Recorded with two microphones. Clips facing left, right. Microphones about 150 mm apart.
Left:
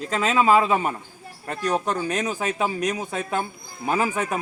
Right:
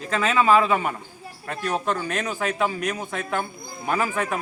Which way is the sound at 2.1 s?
20° left (ahead or behind).